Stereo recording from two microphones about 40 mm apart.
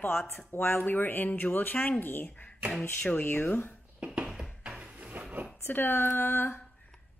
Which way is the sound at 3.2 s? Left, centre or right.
Left.